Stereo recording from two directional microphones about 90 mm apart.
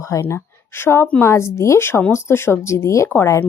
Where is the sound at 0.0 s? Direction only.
30° left (ahead or behind).